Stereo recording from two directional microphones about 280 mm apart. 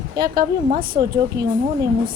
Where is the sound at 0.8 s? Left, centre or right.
Centre.